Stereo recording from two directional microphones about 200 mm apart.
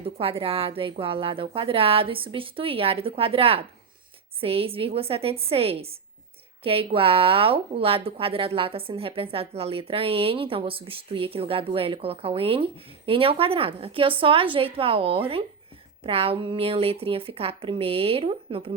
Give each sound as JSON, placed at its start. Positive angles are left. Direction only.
{"t": 0.0, "sound": "a woman's voice", "side_deg": -30}